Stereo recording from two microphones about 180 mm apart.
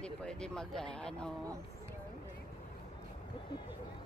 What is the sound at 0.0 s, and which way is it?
Speech, 5° left (ahead or behind).